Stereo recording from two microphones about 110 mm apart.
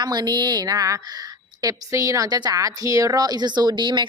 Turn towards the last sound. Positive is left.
turn(degrees=-45)  # may be behind; listen again after turning